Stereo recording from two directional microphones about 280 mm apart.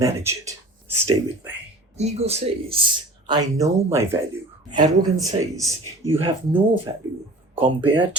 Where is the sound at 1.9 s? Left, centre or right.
Right.